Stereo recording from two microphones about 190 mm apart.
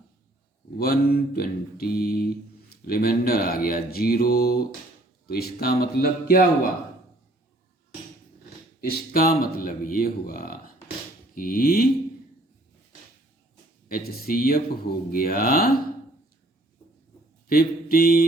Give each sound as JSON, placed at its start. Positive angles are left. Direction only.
{"t": 0.8, "sound": "mantra", "side_deg": 55}
{"t": 8.8, "sound": "mantra", "side_deg": 50}
{"t": 13.8, "sound": "mantra", "side_deg": 50}
{"t": 17.5, "sound": "mantra", "side_deg": 50}